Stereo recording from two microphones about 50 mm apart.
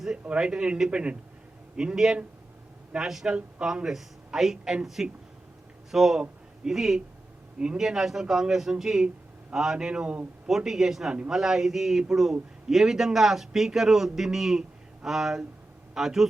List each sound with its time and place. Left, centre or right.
0.3 s a man's voice: centre